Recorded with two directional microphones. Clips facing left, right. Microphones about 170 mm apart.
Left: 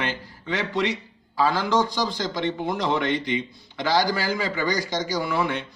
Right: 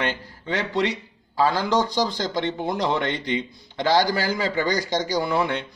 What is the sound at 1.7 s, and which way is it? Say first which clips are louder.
A man's voice: right 1 dB; 20° right (ahead or behind).